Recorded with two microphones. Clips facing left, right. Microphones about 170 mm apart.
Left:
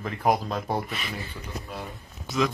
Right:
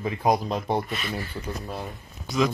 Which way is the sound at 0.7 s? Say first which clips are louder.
Right 4 dB; 5° left (ahead or behind).